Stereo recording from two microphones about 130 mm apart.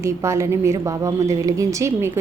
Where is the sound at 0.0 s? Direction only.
20° right (ahead or behind).